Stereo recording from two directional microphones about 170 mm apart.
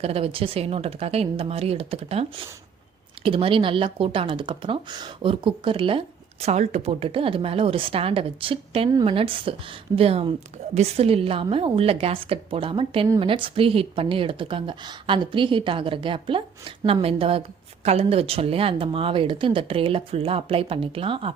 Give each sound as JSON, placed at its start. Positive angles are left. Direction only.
{"t": 0.0, "sound": "speech", "side_deg": -35}
{"t": 3.2, "sound": "speech", "side_deg": -30}